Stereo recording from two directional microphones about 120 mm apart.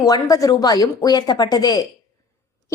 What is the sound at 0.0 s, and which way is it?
A woman's voice, 30° left (ahead or behind).